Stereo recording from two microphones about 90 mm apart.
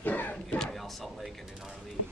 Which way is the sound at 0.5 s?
Centre (ahead or behind).